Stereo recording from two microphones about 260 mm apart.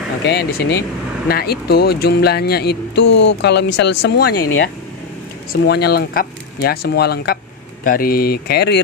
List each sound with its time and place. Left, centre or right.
0.2 s speech: left